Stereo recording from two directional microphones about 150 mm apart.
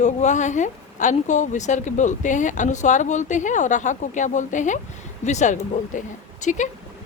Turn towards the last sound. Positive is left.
turn(degrees=55)  # may be behind; listen again after turning